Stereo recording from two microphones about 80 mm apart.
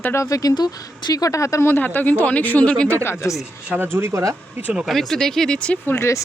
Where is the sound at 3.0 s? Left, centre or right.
Left.